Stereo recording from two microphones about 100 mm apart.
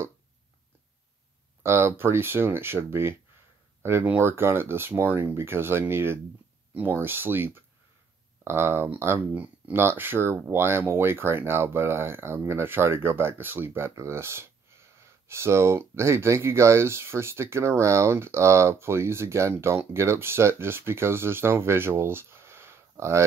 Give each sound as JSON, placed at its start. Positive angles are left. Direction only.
{"t": 1.6, "sound": "speech", "side_deg": -25}